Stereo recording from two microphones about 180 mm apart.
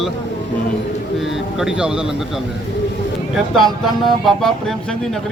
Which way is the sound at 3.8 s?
Centre (ahead or behind).